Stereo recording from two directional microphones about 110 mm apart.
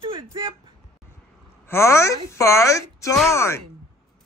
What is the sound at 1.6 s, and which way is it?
Speech, 25° left (ahead or behind).